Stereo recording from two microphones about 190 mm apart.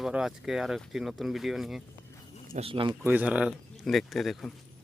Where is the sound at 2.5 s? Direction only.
30° right (ahead or behind).